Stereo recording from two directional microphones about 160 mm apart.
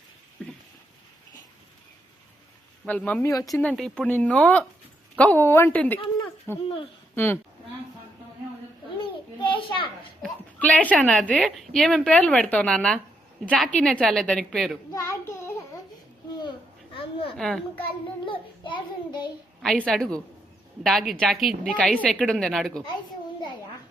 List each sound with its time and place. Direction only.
2.8 s speech: 10° left (ahead or behind)
3.2 s speech: 20° left (ahead or behind)
3.5 s speech: 5° left (ahead or behind)
9.0 s children playing: 30° left (ahead or behind)
10.2 s a woman's voice: 10° left (ahead or behind)
14.9 s child singing: 15° left (ahead or behind)
16.9 s a sound: 35° left (ahead or behind)
17.3 s a child's voice: 5° left (ahead or behind)
18.3 s child singing: 30° left (ahead or behind)
19.6 s a woman's voice: 5° left (ahead or behind)